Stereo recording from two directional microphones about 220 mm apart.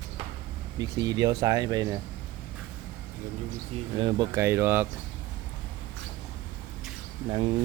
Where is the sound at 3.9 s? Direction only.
20° right (ahead or behind).